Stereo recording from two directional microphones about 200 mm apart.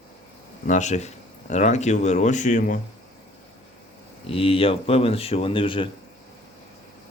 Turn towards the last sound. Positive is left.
turn(degrees=25)  # may be behind; listen again after turning